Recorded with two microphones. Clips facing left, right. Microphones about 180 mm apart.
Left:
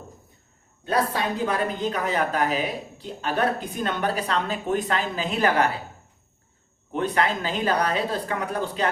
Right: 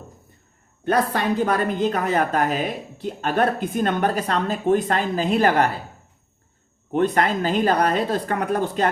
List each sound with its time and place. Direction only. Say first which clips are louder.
0.9 s speech: right 4 dB; 60° right (ahead or behind)
6.9 s speech: right 4 dB; 45° right (ahead or behind)